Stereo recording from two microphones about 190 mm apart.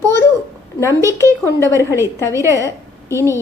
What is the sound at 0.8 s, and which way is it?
A woman's voice, 15° right (ahead or behind).